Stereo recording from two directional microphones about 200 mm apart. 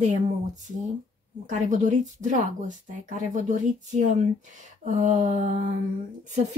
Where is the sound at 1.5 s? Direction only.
40° right (ahead or behind).